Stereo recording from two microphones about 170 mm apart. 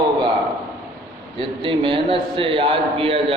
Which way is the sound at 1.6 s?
30° right (ahead or behind).